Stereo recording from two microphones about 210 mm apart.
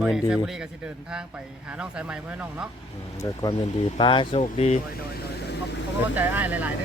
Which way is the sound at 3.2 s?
20° left (ahead or behind).